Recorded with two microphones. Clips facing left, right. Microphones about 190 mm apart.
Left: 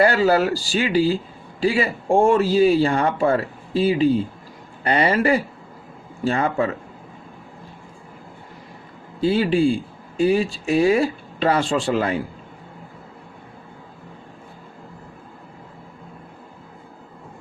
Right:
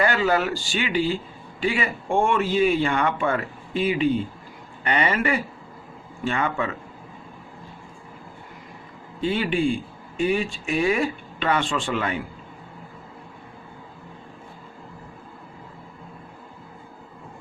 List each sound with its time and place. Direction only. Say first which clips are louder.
0.0 s a man's voice: left 5 dB; 35° left (ahead or behind)
9.2 s a man's voice: left 5 dB; 35° left (ahead or behind)